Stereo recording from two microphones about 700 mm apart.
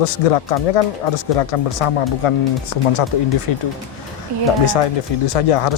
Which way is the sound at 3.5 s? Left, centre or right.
Left.